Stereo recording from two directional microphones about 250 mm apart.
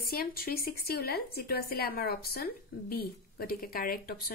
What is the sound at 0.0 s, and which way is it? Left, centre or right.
Speech, left.